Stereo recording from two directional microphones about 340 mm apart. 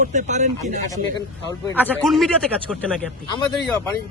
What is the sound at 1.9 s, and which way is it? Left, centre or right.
A man's voice, centre.